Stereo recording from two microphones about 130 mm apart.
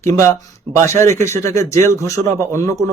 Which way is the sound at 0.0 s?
20° left (ahead or behind).